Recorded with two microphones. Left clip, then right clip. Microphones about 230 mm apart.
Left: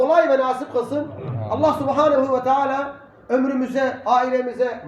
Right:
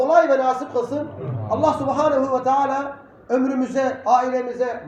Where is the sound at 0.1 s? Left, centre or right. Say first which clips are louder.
Right 1 dB; left.